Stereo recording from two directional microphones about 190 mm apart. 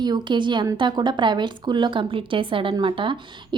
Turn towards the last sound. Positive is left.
turn(degrees=-25)  # may be behind; listen again after turning